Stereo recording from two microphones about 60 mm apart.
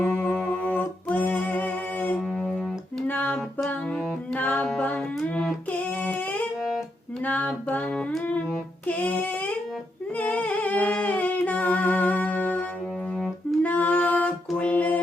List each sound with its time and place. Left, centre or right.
0.0 s music: left
4.4 s music: left
7.3 s music: left
8.9 s child singing: left
10.2 s humming: left
13.6 s a sound: left